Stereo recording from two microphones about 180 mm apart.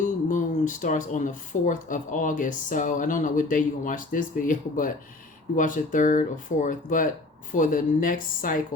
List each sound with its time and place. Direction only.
0.0 s speech: 45° left (ahead or behind)